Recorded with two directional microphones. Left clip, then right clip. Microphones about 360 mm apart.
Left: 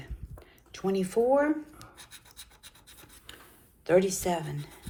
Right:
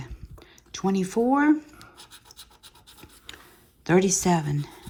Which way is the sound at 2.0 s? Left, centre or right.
Centre.